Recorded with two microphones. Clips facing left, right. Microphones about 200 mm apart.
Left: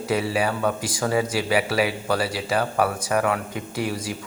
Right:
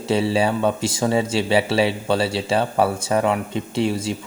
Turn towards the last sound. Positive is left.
turn(degrees=-25)  # may be behind; listen again after turning